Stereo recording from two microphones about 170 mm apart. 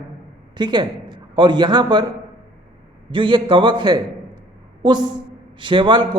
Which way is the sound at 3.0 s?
30° right (ahead or behind).